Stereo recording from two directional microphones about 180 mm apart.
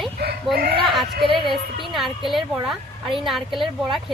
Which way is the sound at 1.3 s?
25° right (ahead or behind).